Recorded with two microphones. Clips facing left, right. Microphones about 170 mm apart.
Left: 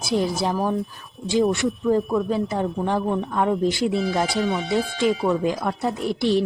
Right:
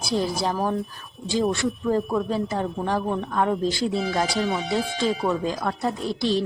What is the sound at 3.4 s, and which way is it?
A woman's voice, 15° left (ahead or behind).